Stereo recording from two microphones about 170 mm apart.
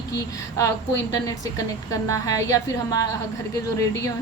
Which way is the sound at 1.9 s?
20° left (ahead or behind).